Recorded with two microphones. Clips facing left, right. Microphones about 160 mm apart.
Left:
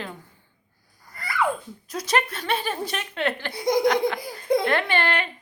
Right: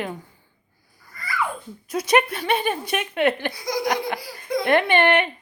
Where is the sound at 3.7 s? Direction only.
55° left (ahead or behind).